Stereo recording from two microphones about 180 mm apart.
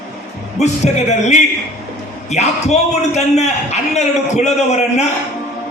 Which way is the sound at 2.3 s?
40° left (ahead or behind).